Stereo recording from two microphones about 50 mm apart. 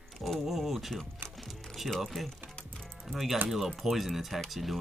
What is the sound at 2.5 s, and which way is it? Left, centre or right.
Typing, centre.